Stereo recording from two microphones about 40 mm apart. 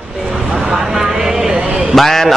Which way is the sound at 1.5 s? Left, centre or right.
Right.